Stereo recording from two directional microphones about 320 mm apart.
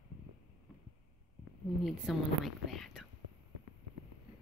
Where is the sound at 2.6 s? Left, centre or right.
Centre.